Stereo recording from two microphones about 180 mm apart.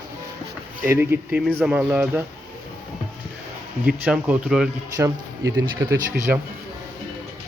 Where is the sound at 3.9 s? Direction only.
5° right (ahead or behind).